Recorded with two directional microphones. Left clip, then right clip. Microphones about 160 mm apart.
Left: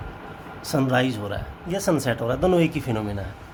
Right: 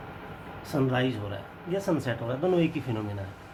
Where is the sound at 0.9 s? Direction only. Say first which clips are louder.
Left 6 dB; 90° left.